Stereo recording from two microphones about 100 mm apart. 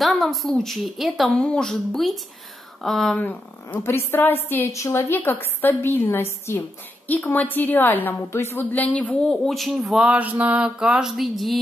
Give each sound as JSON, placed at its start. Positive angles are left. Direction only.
{"t": 0.0, "sound": "a woman's voice", "side_deg": 0}
{"t": 3.3, "sound": "a woman's voice", "side_deg": 20}